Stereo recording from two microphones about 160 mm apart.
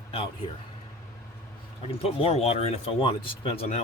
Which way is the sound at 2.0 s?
40° left (ahead or behind).